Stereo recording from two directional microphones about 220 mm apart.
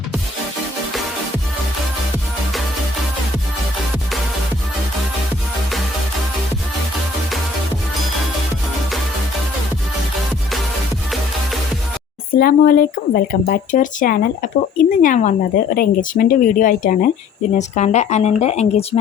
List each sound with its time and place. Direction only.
12.3 s speech: 40° left (ahead or behind)